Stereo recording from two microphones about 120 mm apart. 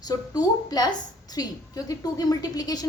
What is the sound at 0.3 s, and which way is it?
A woman's voice, 30° left (ahead or behind).